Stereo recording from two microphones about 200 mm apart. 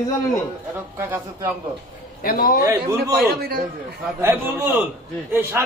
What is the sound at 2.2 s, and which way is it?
Speech, 45° left (ahead or behind).